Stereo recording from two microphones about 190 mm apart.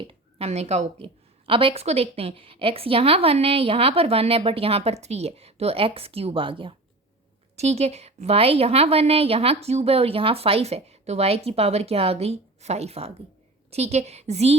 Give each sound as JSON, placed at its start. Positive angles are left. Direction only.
{"t": 0.0, "sound": "a woman's voice", "side_deg": -30}